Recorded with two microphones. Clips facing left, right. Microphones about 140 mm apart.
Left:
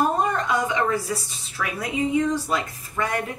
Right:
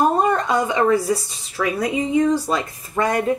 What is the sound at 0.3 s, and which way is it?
A woman's voice, 30° right (ahead or behind).